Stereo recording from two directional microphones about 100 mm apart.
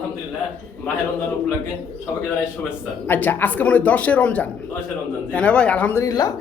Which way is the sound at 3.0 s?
20° left (ahead or behind).